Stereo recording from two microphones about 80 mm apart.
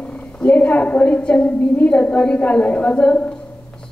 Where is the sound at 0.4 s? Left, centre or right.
Centre.